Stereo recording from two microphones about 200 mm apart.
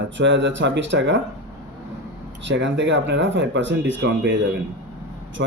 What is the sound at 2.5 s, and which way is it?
Speech, 65° right (ahead or behind).